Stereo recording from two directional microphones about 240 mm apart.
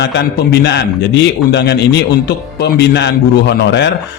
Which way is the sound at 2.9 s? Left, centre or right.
Left.